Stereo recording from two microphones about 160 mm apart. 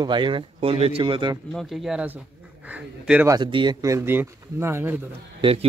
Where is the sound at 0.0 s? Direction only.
30° right (ahead or behind).